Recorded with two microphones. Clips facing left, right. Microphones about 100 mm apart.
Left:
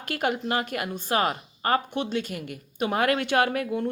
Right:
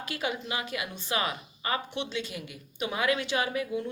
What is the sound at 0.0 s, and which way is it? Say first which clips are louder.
A woman's voice: left 6 dB; 55° left (ahead or behind).